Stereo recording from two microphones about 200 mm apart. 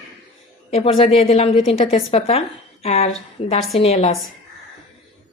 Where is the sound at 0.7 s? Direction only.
30° left (ahead or behind).